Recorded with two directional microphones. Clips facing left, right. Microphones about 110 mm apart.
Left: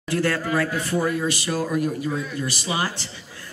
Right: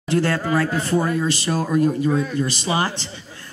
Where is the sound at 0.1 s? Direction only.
25° right (ahead or behind).